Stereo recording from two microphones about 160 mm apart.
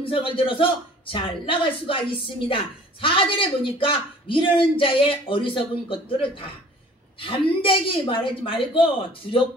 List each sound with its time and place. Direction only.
0.0 s a man's voice: 35° left (ahead or behind)